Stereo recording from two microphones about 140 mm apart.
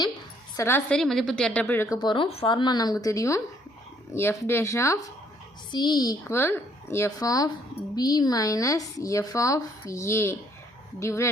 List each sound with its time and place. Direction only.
0.5 s a woman's voice: 20° left (ahead or behind)
0.9 s a woman's voice: 5° left (ahead or behind)
2.0 s speech: 35° left (ahead or behind)